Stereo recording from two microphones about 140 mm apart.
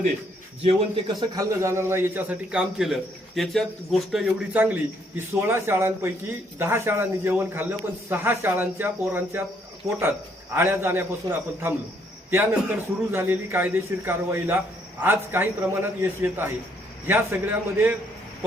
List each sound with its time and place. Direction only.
0.6 s a man's voice: 40° right (ahead or behind)
1.4 s a man's voice: 20° right (ahead or behind)
13.1 s a man's voice: 15° right (ahead or behind)